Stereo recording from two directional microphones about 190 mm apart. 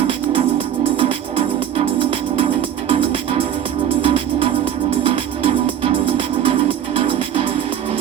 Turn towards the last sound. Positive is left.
turn(degrees=-30)  # may be behind; listen again after turning